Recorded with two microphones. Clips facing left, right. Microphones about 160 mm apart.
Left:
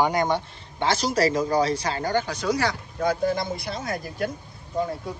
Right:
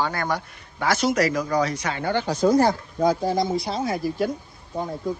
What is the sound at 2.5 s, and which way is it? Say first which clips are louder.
Speech: right 5 dB; 75° left (ahead or behind).